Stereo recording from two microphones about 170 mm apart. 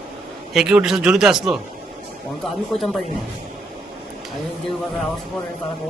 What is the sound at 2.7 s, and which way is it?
Speech, 35° left (ahead or behind).